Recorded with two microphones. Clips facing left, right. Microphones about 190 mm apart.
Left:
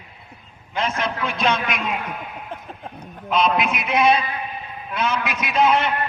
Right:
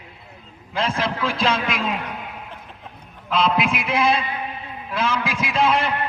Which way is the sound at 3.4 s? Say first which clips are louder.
Even; 30° right (ahead or behind).